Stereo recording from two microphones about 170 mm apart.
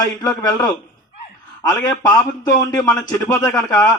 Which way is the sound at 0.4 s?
25° left (ahead or behind).